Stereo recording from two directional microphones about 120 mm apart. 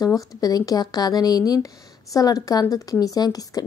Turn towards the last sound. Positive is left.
turn(degrees=30)  # may be behind; listen again after turning